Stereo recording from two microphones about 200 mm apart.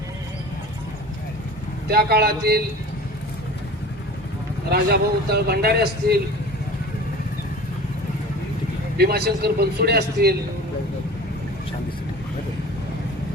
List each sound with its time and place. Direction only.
1.9 s speech: 50° right (ahead or behind)
4.7 s speech: 50° right (ahead or behind)
9.0 s speech: 55° right (ahead or behind)